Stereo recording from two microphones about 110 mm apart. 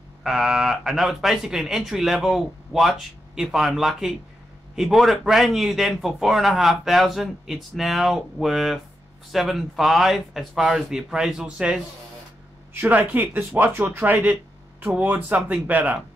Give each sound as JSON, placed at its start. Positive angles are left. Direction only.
{"t": 0.2, "sound": "speech", "side_deg": -5}
{"t": 12.8, "sound": "speech", "side_deg": -15}